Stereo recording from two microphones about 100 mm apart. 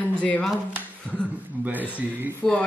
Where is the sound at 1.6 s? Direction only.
15° right (ahead or behind).